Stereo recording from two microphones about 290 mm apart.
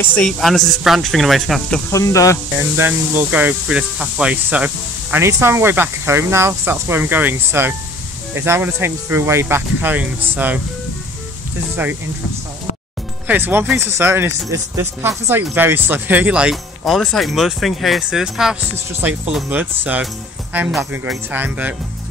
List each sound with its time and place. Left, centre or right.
0.0 s speech: centre
2.8 s speech: centre
11.7 s speech: centre
13.3 s speech: centre